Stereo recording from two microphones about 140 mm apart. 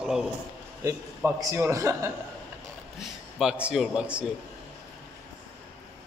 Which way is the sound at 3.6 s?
Centre (ahead or behind).